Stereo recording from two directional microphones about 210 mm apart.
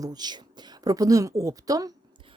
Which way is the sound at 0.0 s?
20° right (ahead or behind).